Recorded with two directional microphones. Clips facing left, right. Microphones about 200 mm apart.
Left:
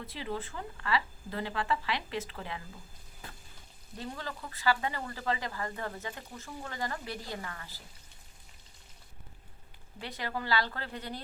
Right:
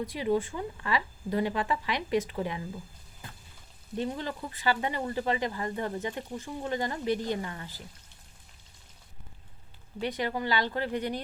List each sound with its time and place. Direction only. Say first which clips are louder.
0.0 s a woman's voice: right 10 dB; 15° right (ahead or behind)
3.9 s speech: right 8 dB; 20° right (ahead or behind)
10.0 s a woman's voice: right 7 dB; 20° right (ahead or behind)